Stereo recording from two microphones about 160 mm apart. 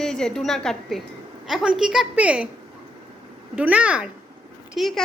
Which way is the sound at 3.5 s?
10° right (ahead or behind).